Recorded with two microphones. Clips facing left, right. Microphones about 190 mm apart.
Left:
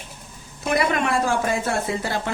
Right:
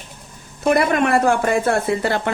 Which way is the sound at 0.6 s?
55° right (ahead or behind).